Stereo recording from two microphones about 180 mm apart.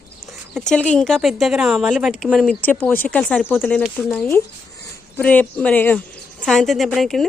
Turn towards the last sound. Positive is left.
turn(degrees=0)  # may be behind; listen again after turning